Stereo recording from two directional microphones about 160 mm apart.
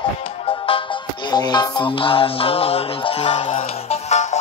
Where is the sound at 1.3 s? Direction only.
25° left (ahead or behind).